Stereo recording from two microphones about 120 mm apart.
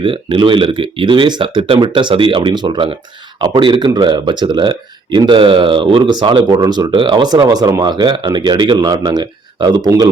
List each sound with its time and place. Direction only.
0.0 s speech: 45° right (ahead or behind)